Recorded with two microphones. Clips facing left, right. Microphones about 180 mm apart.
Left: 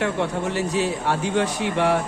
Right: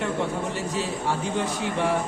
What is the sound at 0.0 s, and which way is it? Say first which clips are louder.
A man's voice: left 3 dB; 70° left (ahead or behind).